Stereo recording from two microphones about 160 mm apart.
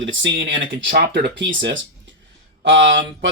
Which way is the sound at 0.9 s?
90° right.